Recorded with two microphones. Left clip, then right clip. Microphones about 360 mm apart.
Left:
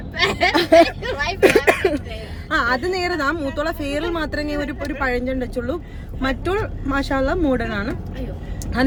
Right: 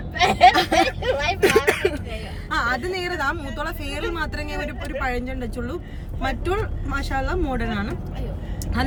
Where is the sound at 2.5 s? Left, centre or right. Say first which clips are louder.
Left 4 dB; centre.